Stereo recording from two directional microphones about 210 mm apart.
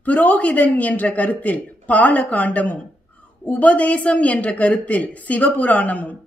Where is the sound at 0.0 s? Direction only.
5° left (ahead or behind).